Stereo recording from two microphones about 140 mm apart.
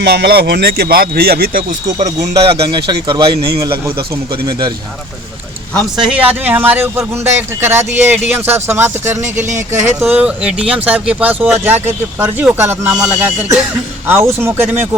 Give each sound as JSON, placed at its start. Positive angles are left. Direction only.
{"t": 0.4, "sound": "speech", "side_deg": -90}
{"t": 2.0, "sound": "speech", "side_deg": -50}
{"t": 5.7, "sound": "a man's voice", "side_deg": -5}